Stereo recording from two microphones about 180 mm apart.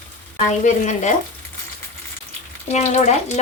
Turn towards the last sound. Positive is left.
turn(degrees=40)  # may be behind; listen again after turning